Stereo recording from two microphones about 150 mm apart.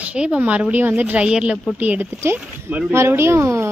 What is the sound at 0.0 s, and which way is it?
A woman's voice, 5° right (ahead or behind).